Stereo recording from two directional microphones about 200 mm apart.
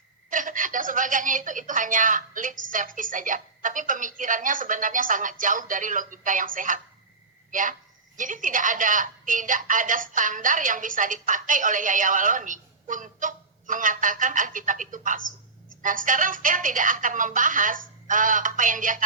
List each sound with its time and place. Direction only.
0.3 s a woman's voice: 40° right (ahead or behind)